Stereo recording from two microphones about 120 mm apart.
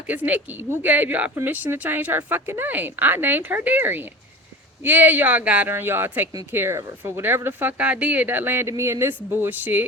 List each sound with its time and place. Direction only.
0.1 s speech: 15° right (ahead or behind)